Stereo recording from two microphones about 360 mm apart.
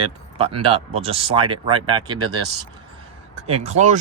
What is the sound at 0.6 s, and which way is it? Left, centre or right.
Speech, centre.